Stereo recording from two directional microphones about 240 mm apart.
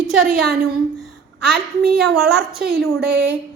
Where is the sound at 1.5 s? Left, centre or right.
Right.